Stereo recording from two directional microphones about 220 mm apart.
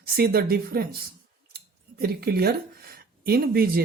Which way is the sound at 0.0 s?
45° right (ahead or behind).